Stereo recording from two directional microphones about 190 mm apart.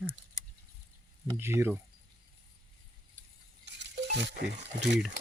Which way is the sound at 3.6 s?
65° right (ahead or behind).